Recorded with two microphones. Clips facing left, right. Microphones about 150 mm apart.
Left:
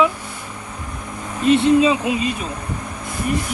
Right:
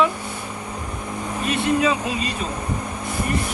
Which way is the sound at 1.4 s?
25° left (ahead or behind).